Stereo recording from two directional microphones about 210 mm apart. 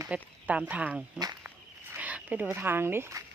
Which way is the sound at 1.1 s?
20° right (ahead or behind).